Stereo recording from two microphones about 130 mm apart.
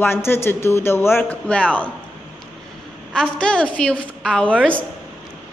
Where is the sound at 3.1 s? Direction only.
5° left (ahead or behind).